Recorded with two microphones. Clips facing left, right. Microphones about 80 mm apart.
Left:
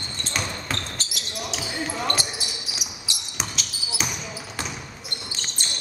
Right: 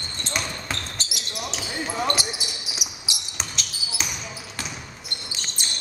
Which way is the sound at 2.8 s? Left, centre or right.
Centre.